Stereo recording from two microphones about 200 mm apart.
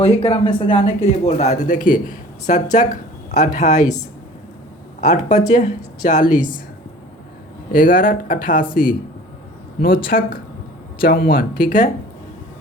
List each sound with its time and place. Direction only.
0.0 s a woman's voice: 25° left (ahead or behind)
4.9 s speech: 40° left (ahead or behind)
7.7 s speech: 45° left (ahead or behind)